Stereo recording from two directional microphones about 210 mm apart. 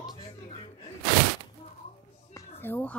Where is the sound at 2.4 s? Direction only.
10° left (ahead or behind).